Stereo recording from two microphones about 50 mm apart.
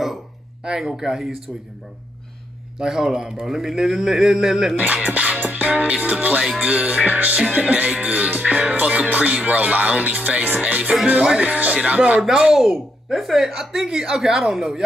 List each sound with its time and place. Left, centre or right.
0.7 s speech: centre
2.8 s speech: centre
4.7 s music: right
12.2 s speech: centre